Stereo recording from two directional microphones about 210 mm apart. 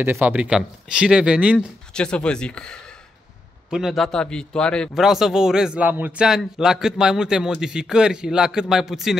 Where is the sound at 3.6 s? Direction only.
Centre (ahead or behind).